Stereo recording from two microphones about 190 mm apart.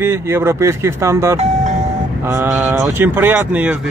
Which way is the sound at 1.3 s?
35° right (ahead or behind).